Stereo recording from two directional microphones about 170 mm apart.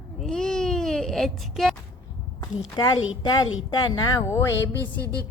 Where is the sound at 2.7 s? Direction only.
25° left (ahead or behind).